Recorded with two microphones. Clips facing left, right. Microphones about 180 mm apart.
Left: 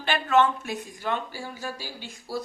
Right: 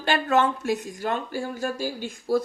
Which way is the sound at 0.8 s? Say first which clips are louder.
Right 2 dB; 45° right (ahead or behind).